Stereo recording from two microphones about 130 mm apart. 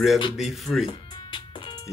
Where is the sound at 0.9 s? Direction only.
40° left (ahead or behind).